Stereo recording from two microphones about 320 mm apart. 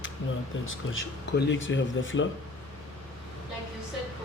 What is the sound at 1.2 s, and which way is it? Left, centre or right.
Speech, left.